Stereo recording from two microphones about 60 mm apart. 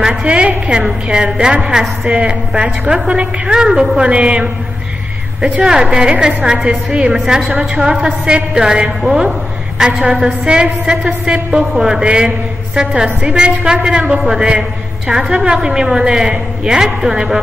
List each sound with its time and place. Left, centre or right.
0.0 s a woman's voice: centre